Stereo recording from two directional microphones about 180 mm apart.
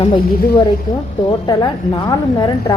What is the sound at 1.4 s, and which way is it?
A woman's voice, 25° left (ahead or behind).